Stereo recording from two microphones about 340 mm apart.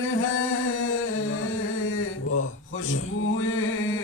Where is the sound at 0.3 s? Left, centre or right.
Left.